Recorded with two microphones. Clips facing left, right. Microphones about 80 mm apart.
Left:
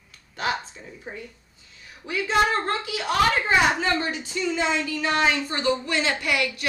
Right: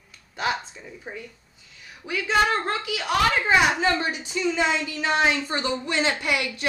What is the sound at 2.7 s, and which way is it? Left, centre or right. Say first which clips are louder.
Speech: even; left.